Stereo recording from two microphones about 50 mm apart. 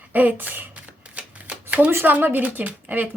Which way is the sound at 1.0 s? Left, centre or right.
Right.